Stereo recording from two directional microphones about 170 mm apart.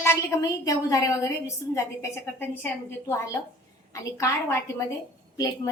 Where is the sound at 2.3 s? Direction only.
15° left (ahead or behind).